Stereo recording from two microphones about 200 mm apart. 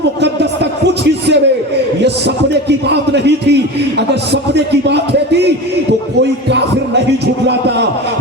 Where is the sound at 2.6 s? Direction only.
60° right (ahead or behind).